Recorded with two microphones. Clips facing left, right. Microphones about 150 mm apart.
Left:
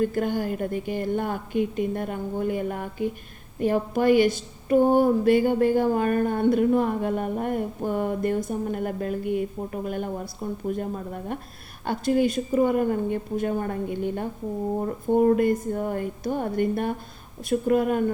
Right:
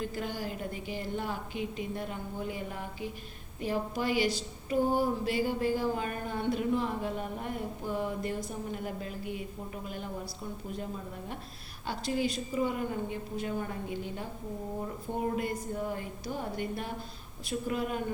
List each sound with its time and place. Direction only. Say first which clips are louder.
0.0 s a woman's voice: left 11 dB; 55° left (ahead or behind)